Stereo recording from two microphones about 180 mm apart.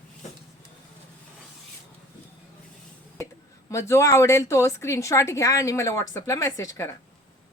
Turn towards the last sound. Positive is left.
turn(degrees=15)  # may be behind; listen again after turning